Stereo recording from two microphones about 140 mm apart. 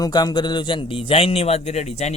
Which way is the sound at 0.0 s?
30° left (ahead or behind).